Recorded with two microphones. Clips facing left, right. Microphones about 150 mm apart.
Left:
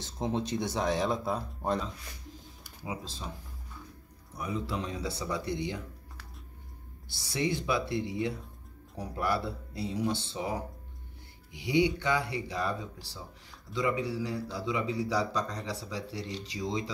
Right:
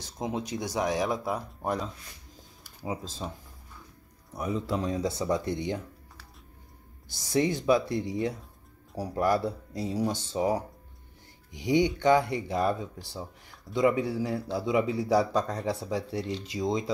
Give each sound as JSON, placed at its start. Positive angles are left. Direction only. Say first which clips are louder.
{"t": 0.2, "sound": "speech", "louder": "left 1 dB", "side_deg": -15}
{"t": 2.8, "sound": "speech", "louder": "right 4 dB", "side_deg": -40}
{"t": 4.6, "sound": "speech", "louder": "right 6 dB", "side_deg": -40}
{"t": 7.1, "sound": "speech", "louder": "right 5 dB", "side_deg": -45}